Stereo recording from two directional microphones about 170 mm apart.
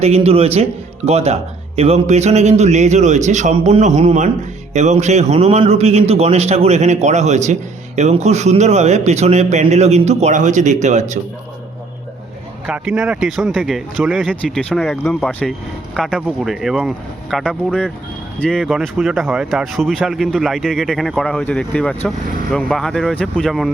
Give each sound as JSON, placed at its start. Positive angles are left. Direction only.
{"t": 0.0, "sound": "a man's voice", "side_deg": -40}
{"t": 12.6, "sound": "speech", "side_deg": -5}